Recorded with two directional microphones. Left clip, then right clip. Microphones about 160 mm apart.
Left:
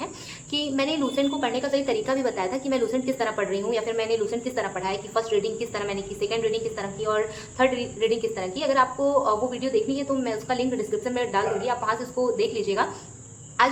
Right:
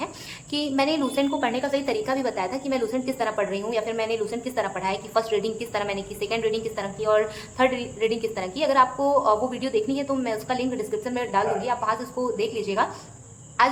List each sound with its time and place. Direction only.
0.5 s a woman's voice: 20° right (ahead or behind)